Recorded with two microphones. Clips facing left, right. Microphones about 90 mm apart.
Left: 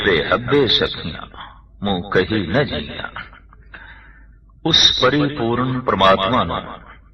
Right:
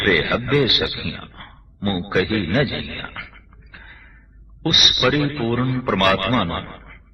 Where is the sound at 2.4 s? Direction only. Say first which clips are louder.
Left 2 dB; 35° left (ahead or behind).